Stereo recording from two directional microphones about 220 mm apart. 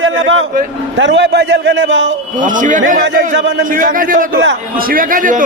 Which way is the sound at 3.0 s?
55° right (ahead or behind).